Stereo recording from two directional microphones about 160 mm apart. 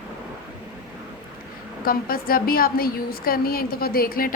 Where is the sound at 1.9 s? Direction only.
65° left (ahead or behind).